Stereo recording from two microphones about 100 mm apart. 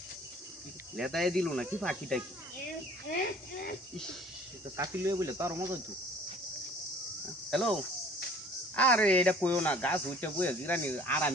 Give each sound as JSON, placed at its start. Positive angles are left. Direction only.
{"t": 0.9, "sound": "speech", "side_deg": 0}
{"t": 4.8, "sound": "speech", "side_deg": -35}
{"t": 7.5, "sound": "speech", "side_deg": 5}